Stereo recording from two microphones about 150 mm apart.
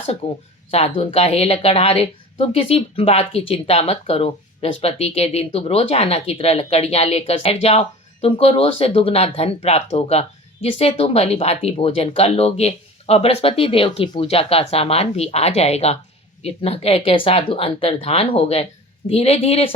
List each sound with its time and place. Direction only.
0.7 s a woman's voice: 40° left (ahead or behind)